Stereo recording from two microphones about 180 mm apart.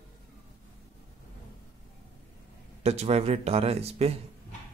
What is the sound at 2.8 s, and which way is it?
Speech, 35° right (ahead or behind).